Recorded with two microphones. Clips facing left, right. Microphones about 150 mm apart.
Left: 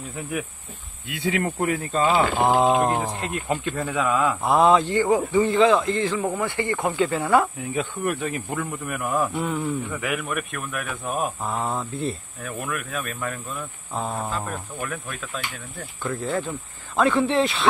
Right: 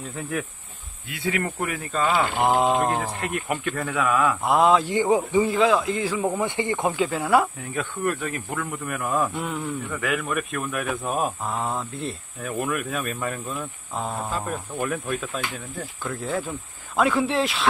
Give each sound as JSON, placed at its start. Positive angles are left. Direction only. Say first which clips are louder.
{"t": 0.1, "sound": "speech", "louder": "even", "side_deg": 10}
{"t": 1.1, "sound": "speech", "louder": "left 2 dB", "side_deg": 25}
{"t": 2.4, "sound": "speech", "louder": "left 1 dB", "side_deg": 0}
{"t": 3.0, "sound": "speech", "louder": "even", "side_deg": 15}
{"t": 4.5, "sound": "speech", "louder": "left 2 dB", "side_deg": 0}
{"t": 4.8, "sound": "speech", "louder": "even", "side_deg": -15}
{"t": 7.1, "sound": "speech", "louder": "left 1 dB", "side_deg": -5}
{"t": 7.7, "sound": "speech", "louder": "even", "side_deg": 15}
{"t": 9.8, "sound": "speech", "louder": "right 1 dB", "side_deg": 10}
{"t": 14.4, "sound": "speech", "louder": "right 3 dB", "side_deg": -10}